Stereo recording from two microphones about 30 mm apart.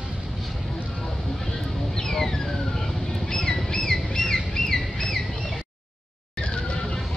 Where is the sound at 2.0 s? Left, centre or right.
Centre.